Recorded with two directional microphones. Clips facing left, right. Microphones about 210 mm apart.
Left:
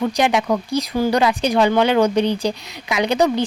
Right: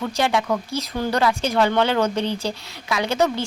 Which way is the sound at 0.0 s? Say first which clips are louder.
Left 4 dB; 20° left (ahead or behind).